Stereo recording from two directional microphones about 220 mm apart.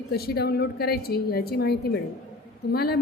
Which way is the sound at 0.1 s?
45° left (ahead or behind).